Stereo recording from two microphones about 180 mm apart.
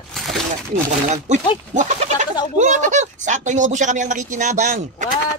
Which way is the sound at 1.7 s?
40° right (ahead or behind).